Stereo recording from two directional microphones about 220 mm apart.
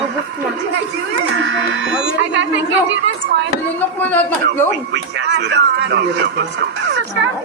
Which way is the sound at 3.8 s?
10° left (ahead or behind).